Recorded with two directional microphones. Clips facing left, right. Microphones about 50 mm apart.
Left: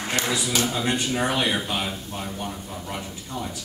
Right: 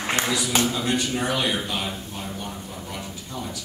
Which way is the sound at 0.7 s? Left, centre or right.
Left.